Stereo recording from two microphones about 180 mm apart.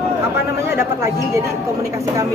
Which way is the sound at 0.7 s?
15° right (ahead or behind).